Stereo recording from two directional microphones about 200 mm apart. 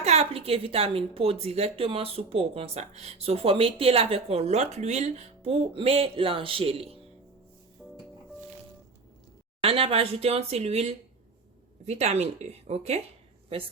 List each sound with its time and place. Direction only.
0.0 s a woman's voice: 30° right (ahead or behind)
7.8 s music: centre (ahead or behind)
9.6 s a woman's voice: 30° right (ahead or behind)